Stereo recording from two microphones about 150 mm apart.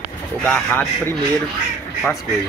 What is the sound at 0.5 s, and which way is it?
Speech, 15° left (ahead or behind).